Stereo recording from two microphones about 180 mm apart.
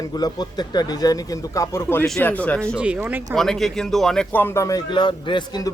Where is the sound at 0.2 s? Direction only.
20° left (ahead or behind); by 2.7 s 5° left (ahead or behind).